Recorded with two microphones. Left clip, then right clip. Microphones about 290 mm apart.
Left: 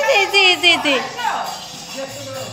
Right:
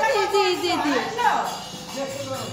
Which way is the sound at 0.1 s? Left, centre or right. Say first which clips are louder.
Left 7 dB; left.